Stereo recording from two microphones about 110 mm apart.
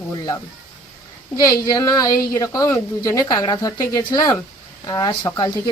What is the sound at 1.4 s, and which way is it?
A woman's voice, 35° left (ahead or behind).